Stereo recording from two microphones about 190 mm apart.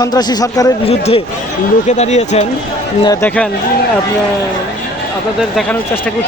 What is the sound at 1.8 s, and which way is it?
Speech, 35° left (ahead or behind).